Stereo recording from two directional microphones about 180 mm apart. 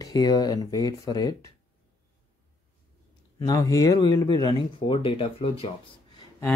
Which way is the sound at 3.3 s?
20° left (ahead or behind).